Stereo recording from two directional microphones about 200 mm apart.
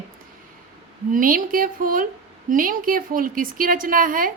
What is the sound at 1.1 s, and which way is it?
A woman's voice, 45° right (ahead or behind).